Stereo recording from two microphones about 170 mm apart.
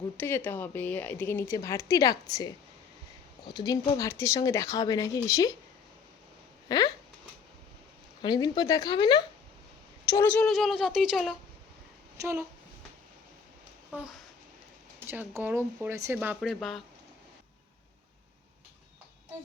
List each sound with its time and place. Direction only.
0.2 s a woman's voice: 15° left (ahead or behind)
3.5 s speech: 25° left (ahead or behind)
6.7 s speech: 25° left (ahead or behind)
8.2 s speech: 25° left (ahead or behind)
10.2 s speech: 5° left (ahead or behind)
12.1 s speech: 15° right (ahead or behind)
13.9 s a child's voice: 5° right (ahead or behind)